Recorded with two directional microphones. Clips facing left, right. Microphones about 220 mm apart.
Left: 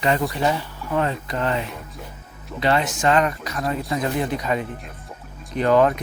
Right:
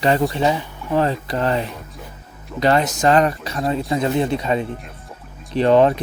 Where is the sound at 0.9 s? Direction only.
35° right (ahead or behind).